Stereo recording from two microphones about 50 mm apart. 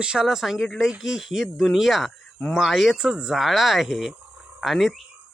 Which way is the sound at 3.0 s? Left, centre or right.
Centre.